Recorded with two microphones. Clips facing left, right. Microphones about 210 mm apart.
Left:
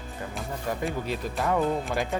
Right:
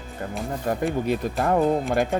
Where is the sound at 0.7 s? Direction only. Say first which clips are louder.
Right 6 dB; 50° right (ahead or behind).